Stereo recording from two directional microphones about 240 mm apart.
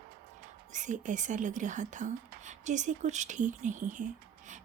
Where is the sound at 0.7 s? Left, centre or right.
Right.